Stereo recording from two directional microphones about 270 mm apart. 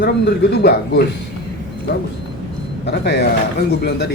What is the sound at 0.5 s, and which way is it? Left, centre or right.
Speech, left.